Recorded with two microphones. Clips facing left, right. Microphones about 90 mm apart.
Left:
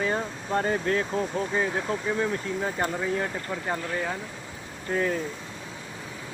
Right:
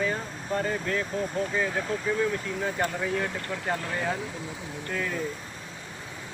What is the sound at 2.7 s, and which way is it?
Speech, 15° left (ahead or behind).